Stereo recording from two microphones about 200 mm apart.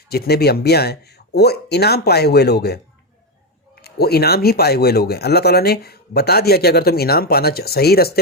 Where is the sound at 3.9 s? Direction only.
50° left (ahead or behind).